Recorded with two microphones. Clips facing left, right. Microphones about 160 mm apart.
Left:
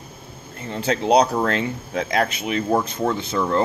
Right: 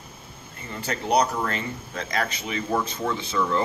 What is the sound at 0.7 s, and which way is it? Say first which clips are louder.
Speech: left 7 dB; 70° left (ahead or behind).